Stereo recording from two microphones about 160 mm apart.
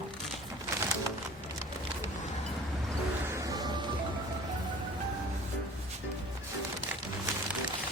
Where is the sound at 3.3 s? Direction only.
20° right (ahead or behind).